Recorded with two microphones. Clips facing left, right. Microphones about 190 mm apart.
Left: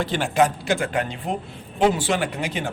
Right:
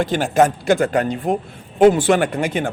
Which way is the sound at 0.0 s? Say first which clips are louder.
Right 4 dB; 45° right (ahead or behind).